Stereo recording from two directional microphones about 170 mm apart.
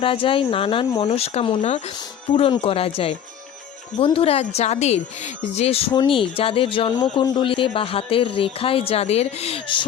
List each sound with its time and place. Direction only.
0.0 s speech: 30° left (ahead or behind)